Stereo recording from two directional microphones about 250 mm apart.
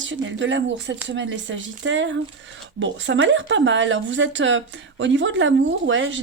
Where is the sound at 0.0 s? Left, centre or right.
Right.